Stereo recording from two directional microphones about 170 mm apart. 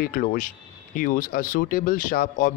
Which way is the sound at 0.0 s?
60° left (ahead or behind).